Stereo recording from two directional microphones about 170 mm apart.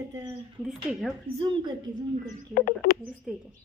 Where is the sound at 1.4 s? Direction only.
25° right (ahead or behind).